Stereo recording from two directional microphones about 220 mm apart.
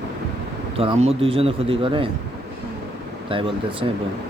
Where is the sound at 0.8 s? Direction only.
25° right (ahead or behind).